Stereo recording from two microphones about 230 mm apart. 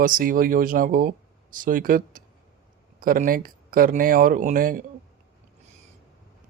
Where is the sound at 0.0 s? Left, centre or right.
Right.